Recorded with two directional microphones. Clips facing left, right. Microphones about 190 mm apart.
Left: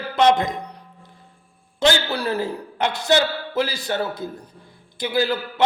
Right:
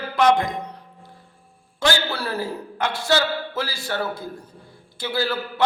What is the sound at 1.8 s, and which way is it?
A man's voice, 20° left (ahead or behind).